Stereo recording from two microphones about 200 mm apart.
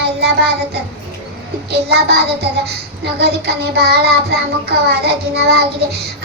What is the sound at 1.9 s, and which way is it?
Child singing, 50° right (ahead or behind).